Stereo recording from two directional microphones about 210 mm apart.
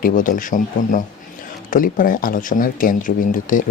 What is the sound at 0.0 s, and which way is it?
Speech, 40° left (ahead or behind).